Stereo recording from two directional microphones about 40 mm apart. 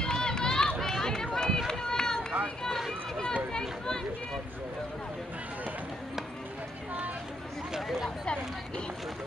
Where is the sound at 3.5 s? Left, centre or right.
Centre.